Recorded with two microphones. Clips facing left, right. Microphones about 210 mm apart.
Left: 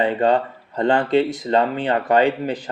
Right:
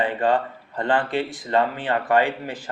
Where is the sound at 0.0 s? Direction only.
25° left (ahead or behind).